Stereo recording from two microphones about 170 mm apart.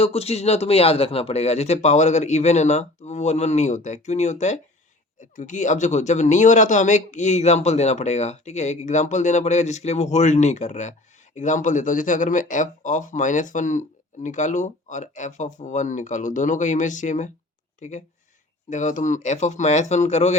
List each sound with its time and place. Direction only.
0.0 s a man's voice: 35° left (ahead or behind)